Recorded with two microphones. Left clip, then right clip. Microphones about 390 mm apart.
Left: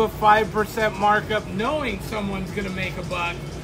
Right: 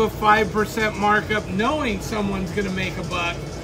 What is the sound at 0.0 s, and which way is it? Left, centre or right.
Speech, centre.